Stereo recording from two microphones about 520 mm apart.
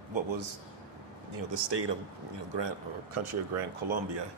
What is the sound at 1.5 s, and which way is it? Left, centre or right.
Speech, right.